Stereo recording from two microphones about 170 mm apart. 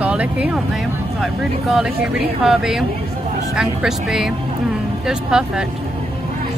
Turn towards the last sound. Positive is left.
turn(degrees=-5)  # may be behind; listen again after turning